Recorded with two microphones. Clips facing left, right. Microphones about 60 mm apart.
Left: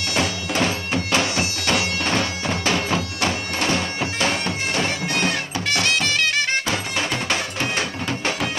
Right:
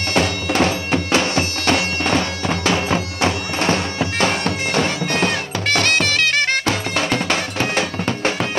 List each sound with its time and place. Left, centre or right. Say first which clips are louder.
0.1 s bagpipes: right 5 dB; right
5.2 s music: right 3 dB; right